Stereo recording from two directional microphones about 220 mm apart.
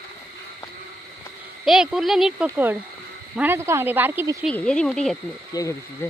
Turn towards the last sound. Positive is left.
turn(degrees=10)  # may be behind; listen again after turning